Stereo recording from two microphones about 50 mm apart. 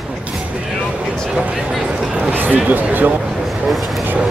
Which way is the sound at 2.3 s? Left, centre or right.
Right.